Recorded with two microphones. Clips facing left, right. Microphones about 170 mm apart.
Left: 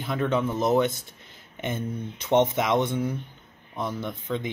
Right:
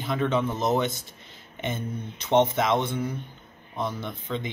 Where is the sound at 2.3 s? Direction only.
10° left (ahead or behind).